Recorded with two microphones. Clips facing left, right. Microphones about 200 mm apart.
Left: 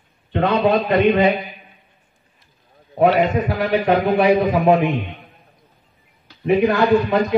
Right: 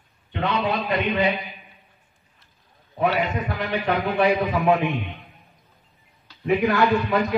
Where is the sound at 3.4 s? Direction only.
40° left (ahead or behind).